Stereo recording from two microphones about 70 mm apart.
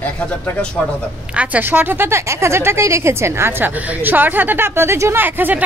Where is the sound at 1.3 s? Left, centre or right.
Right.